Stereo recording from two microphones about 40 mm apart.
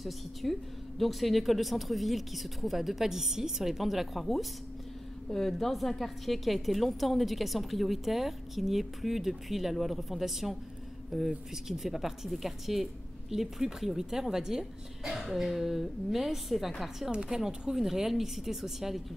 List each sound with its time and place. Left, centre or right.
0.0 s a woman's voice: centre
17.1 s a woman's voice: right
17.7 s speech: centre